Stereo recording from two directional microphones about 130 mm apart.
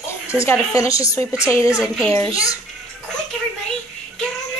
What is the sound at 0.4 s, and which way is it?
A woman's voice, 25° left (ahead or behind).